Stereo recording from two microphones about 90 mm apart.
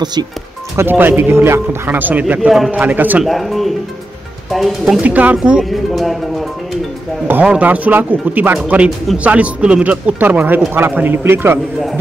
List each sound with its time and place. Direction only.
0.0 s speech: 50° right (ahead or behind)
0.7 s a man's voice: 25° right (ahead or behind)
3.3 s speech: centre (ahead or behind)
5.0 s speech: 15° right (ahead or behind); by 6.4 s centre (ahead or behind)
7.4 s a man's voice: 15° right (ahead or behind)